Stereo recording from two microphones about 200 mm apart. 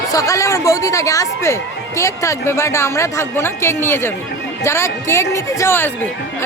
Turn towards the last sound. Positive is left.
turn(degrees=15)  # may be behind; listen again after turning